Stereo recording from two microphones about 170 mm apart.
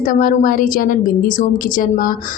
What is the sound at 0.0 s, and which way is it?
A woman's voice, 55° left (ahead or behind).